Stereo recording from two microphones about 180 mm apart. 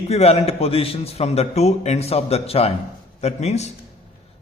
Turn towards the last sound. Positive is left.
turn(degrees=40)  # may be behind; listen again after turning